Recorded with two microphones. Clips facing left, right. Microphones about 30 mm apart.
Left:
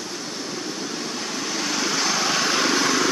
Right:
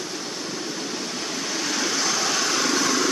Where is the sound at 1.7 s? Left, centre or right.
Centre; by 3.1 s left.